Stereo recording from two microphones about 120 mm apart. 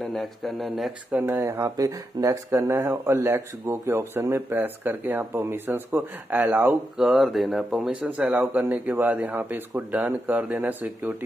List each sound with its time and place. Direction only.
0.0 s speech: centre (ahead or behind)
1.1 s speech: 15° right (ahead or behind)
1.5 s speech: 30° right (ahead or behind)
7.0 s speech: 5° right (ahead or behind)
8.0 s speech: 15° right (ahead or behind)